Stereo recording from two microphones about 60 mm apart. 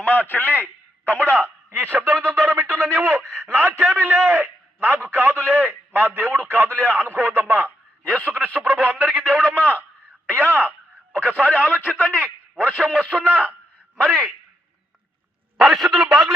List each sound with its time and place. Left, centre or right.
0.0 s a man's voice: left
1.7 s a man's voice: right
8.4 s a sound: centre
9.6 s a man's voice: left
10.3 s a man's voice: right
11.1 s a man's voice: left
15.5 s a man's voice: centre